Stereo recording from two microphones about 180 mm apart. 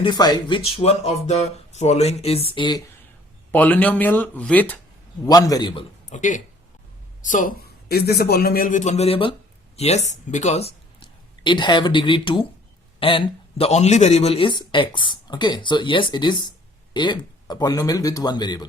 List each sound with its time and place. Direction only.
0.0 s speech: 25° left (ahead or behind)
3.5 s speech: 10° left (ahead or behind)
5.2 s speech: 20° left (ahead or behind)
6.1 s speech: 45° left (ahead or behind)
7.9 s a man's voice: 60° left (ahead or behind); by 18.7 s 25° left (ahead or behind)